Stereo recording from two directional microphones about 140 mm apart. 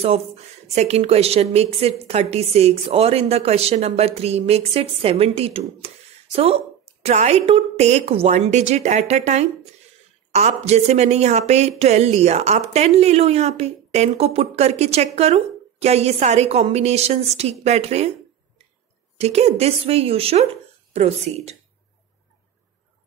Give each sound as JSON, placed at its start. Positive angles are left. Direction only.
{"t": 0.7, "sound": "a woman's voice", "side_deg": -50}
{"t": 19.1, "sound": "a woman's voice", "side_deg": -50}